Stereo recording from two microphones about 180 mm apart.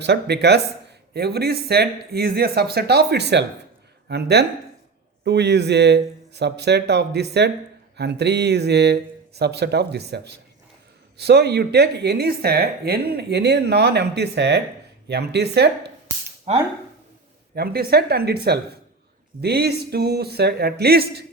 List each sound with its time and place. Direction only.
0.0 s speech: 70° right (ahead or behind)
16.5 s speech: 35° right (ahead or behind)
17.5 s speech: 60° right (ahead or behind)